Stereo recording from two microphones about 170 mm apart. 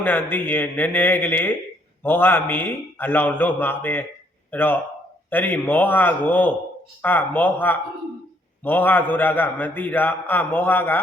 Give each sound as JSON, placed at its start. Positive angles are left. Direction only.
{"t": 0.0, "sound": "a man's voice", "side_deg": 10}